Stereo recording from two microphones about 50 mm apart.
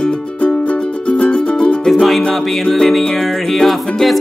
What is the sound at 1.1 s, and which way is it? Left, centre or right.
Music, left.